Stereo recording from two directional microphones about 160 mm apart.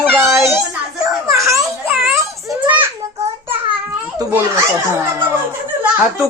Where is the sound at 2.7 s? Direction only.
10° right (ahead or behind).